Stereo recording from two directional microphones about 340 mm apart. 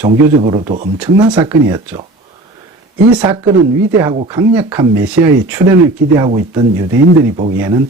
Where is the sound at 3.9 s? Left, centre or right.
Centre.